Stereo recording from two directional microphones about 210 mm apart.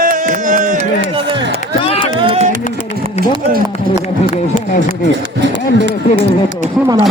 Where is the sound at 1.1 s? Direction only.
25° right (ahead or behind).